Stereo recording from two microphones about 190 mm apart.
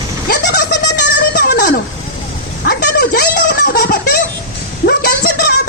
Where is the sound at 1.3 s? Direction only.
55° left (ahead or behind).